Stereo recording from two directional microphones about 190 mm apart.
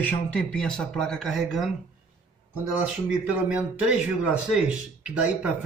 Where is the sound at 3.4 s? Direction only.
5° right (ahead or behind).